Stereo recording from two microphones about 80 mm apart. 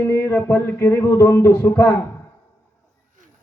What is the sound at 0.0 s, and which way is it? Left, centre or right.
Speech, left.